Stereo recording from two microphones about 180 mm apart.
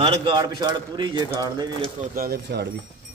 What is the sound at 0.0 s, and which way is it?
A man's voice, 25° right (ahead or behind).